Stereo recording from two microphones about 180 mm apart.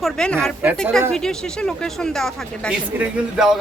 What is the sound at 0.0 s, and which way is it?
Speech, 5° left (ahead or behind).